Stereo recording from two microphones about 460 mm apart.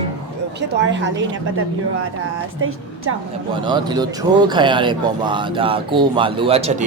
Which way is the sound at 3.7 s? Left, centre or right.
Centre.